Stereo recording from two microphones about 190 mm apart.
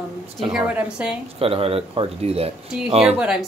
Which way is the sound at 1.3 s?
30° right (ahead or behind).